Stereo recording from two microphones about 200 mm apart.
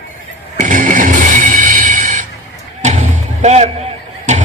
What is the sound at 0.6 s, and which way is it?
Music, 40° right (ahead or behind).